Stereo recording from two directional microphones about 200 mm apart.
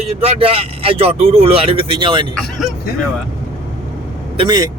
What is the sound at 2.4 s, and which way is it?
Speech, centre (ahead or behind).